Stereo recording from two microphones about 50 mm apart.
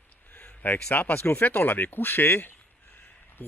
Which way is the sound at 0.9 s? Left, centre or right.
Left.